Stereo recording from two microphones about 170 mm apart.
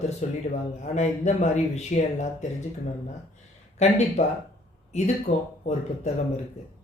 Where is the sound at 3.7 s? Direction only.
40° left (ahead or behind).